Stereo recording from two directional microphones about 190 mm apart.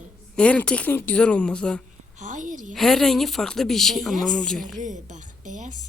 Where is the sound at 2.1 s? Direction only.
40° right (ahead or behind).